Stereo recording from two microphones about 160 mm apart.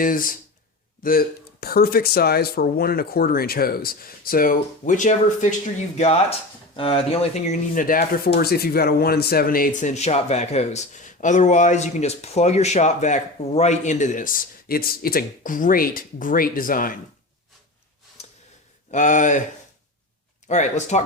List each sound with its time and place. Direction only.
0.0 s speech: 60° left (ahead or behind)
6.7 s speech: 35° left (ahead or behind); by 9.9 s 65° left (ahead or behind)
9.9 s speech: 45° left (ahead or behind); by 17.0 s 60° left (ahead or behind)
18.9 s speech: 50° left (ahead or behind)
20.5 s speech: 45° left (ahead or behind)